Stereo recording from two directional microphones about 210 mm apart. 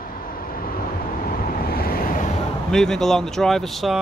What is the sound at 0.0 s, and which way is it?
Vehicle, 45° left (ahead or behind).